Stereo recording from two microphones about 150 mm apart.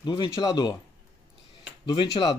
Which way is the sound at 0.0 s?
30° left (ahead or behind).